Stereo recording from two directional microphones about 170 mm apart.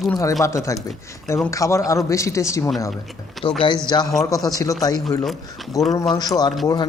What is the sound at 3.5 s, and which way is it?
Speech, 30° left (ahead or behind).